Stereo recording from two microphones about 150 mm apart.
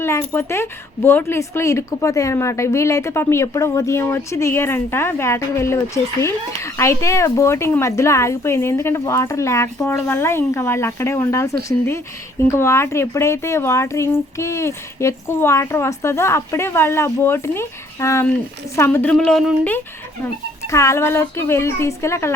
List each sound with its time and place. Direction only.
0.0 s speech: 15° left (ahead or behind)
20.2 s speech: 20° left (ahead or behind)